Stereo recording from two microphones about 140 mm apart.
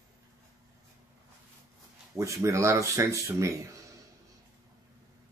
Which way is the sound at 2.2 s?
20° right (ahead or behind).